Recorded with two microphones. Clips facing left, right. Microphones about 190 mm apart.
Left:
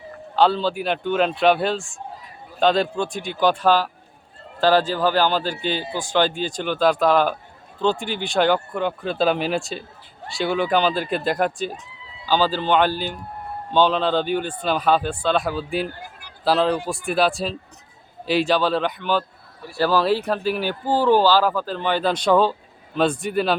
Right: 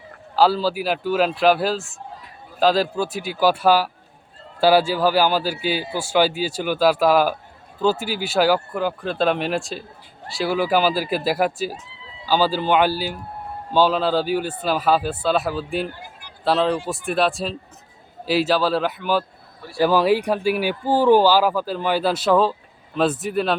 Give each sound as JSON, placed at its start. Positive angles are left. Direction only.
{"t": 0.3, "sound": "speech", "side_deg": -5}